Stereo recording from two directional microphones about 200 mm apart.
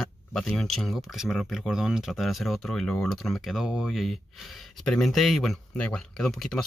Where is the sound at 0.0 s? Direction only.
Centre (ahead or behind).